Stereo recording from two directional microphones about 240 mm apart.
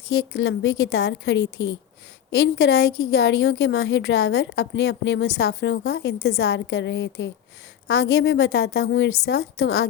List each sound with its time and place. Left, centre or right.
0.3 s a woman's voice: left
9.6 s a woman's voice: left